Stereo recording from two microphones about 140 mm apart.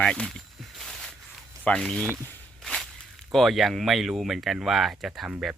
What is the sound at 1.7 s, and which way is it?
Speech, 5° left (ahead or behind).